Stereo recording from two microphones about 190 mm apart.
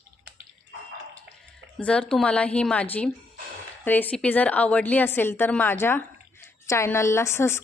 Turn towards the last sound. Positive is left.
turn(degrees=15)  # may be behind; listen again after turning